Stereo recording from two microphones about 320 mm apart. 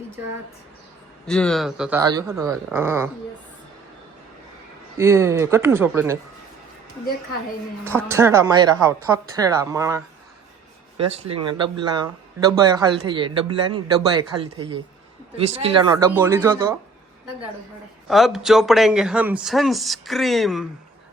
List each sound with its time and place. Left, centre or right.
1.3 s a woman's voice: centre
4.9 s a woman's voice: centre
8.0 s a woman's voice: centre
18.1 s speech: centre